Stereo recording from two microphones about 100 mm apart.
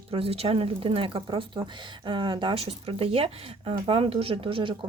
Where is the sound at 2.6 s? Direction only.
75° right (ahead or behind).